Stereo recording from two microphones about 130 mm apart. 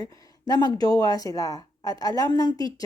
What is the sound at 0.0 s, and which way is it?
Speech, 30° left (ahead or behind).